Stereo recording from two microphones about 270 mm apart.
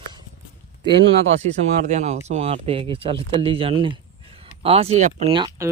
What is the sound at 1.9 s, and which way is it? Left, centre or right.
Speech, right.